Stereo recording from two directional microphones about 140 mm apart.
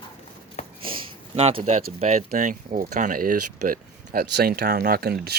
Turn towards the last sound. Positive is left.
turn(degrees=-90)